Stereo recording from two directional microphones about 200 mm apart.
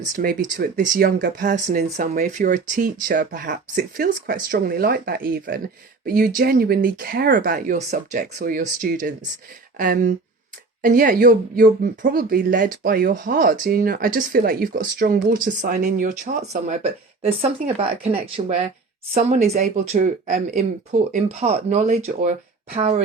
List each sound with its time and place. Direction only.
0.2 s speech: 45° right (ahead or behind)